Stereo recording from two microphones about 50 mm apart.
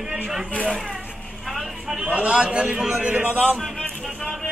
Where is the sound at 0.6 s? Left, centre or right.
Centre.